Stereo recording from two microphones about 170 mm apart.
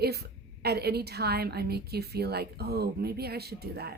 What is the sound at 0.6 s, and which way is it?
A woman's voice, 70° right (ahead or behind).